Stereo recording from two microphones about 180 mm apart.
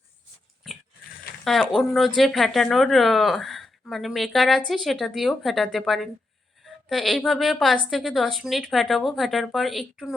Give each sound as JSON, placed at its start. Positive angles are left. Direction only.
{"t": 1.5, "sound": "a woman's voice", "side_deg": 0}